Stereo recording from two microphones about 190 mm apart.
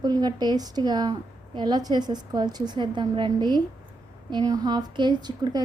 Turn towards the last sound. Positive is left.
turn(degrees=-20)  # may be behind; listen again after turning